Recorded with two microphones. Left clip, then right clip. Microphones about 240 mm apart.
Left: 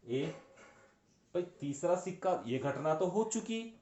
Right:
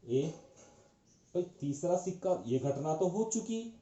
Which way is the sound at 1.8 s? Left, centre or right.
Left.